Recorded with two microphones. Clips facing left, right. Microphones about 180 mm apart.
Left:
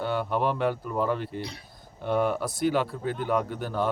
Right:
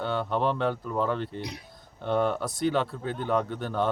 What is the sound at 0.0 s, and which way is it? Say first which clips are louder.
Speech: even; 5° left (ahead or behind).